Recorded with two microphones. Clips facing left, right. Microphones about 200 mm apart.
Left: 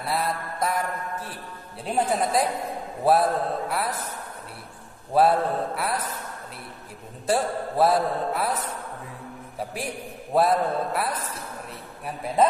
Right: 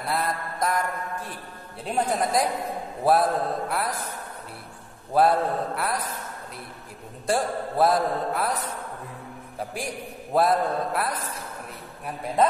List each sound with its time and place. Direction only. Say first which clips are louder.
0.0 s mantra: even; centre (ahead or behind)
1.9 s a man's voice: left 1 dB; 10° left (ahead or behind)
3.1 s mantra: left 1 dB; centre (ahead or behind)
5.1 s mantra: left 1 dB; centre (ahead or behind)
7.2 s mantra: left 1 dB; centre (ahead or behind)
10.3 s mantra: even; centre (ahead or behind)